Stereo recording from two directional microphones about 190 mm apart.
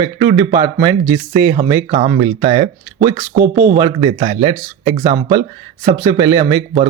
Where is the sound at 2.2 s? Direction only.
35° right (ahead or behind).